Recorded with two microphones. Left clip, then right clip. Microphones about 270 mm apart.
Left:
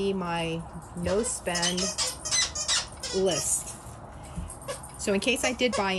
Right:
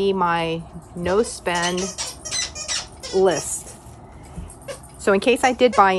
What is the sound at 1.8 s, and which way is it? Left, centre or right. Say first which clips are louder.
Squawk: right 2 dB; centre.